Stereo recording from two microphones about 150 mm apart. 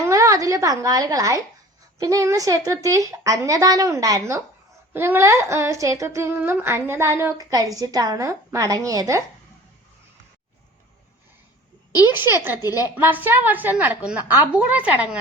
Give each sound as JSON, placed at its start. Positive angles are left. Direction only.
{"t": 0.0, "sound": "a woman's voice", "side_deg": -20}
{"t": 12.1, "sound": "a woman's voice", "side_deg": -15}
{"t": 12.6, "sound": "a woman's voice", "side_deg": 25}
{"t": 13.0, "sound": "a woman's voice", "side_deg": -10}